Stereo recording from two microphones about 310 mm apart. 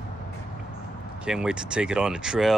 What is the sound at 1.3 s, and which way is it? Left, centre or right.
Speech, centre.